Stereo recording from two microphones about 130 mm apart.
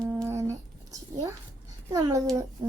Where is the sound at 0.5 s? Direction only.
25° right (ahead or behind).